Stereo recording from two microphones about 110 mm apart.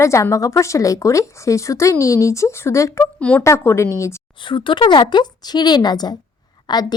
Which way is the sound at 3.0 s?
10° left (ahead or behind).